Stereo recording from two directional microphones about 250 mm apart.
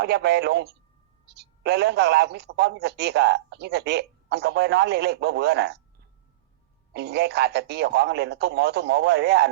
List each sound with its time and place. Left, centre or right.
0.0 s a man's voice: right
6.9 s a man's voice: right